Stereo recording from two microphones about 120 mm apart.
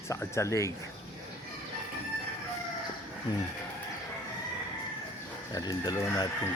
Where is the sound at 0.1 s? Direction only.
25° left (ahead or behind).